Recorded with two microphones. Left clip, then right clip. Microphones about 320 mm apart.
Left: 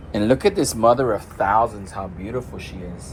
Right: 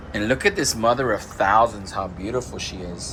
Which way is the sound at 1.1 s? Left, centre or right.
Centre.